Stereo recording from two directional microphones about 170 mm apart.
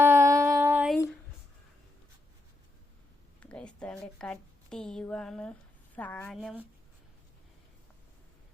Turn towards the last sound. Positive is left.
turn(degrees=0)  # may be behind; listen again after turning